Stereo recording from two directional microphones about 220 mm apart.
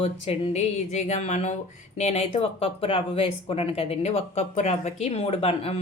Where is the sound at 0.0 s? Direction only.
30° left (ahead or behind).